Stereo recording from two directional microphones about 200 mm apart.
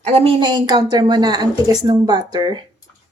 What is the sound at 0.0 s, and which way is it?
A woman's voice, 30° right (ahead or behind).